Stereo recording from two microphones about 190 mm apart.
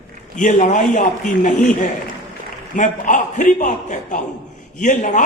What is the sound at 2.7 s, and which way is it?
A man's voice, 45° left (ahead or behind).